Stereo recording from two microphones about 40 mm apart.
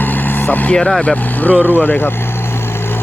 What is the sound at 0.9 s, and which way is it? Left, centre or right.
Speech, centre.